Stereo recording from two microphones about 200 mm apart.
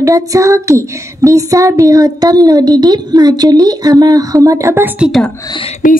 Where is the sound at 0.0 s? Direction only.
15° right (ahead or behind).